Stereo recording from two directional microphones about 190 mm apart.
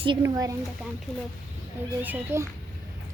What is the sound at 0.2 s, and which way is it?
Speech, 20° right (ahead or behind).